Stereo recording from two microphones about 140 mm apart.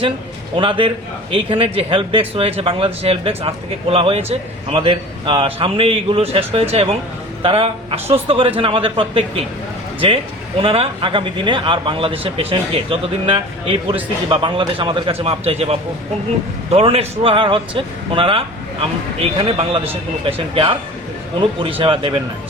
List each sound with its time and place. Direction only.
0.5 s speech: 35° right (ahead or behind)
10.6 s speech: 40° right (ahead or behind)